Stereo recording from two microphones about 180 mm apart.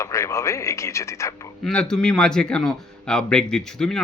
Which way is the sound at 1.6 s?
5° left (ahead or behind).